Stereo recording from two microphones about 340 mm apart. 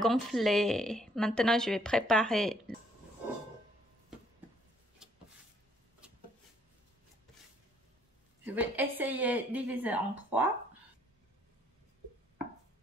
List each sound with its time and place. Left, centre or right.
0.0 s a woman's voice: centre
8.5 s a woman's voice: centre